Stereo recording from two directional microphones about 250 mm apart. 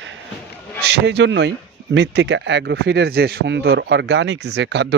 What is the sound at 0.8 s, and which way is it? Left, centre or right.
Speech, right.